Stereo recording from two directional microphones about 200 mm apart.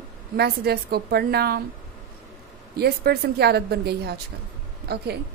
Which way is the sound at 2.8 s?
55° right (ahead or behind).